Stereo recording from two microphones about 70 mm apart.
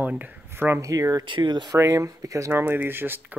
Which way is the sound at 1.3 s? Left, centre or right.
Right.